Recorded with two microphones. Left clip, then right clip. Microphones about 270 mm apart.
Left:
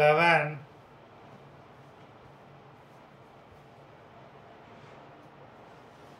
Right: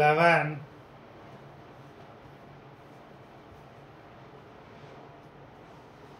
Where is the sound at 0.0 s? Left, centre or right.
Centre.